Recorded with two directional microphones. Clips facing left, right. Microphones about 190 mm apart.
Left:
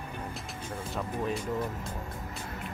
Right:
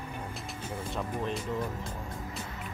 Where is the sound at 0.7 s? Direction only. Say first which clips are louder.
Even; 5° left (ahead or behind).